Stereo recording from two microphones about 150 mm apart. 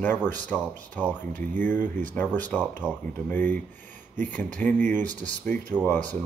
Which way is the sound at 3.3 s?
10° left (ahead or behind).